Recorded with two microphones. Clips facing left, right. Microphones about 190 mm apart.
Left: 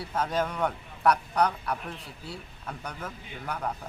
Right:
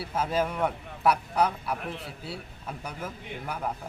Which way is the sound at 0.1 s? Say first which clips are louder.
Right 1 dB; 5° right (ahead or behind).